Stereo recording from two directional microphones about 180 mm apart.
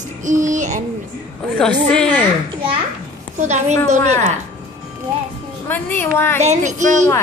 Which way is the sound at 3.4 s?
40° right (ahead or behind).